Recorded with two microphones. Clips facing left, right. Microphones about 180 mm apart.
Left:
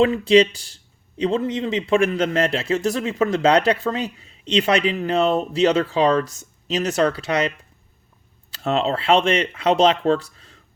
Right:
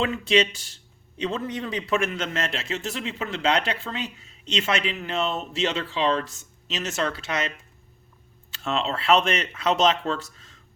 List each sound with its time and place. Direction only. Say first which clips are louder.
0.0 s speech: left 8 dB; 35° left (ahead or behind)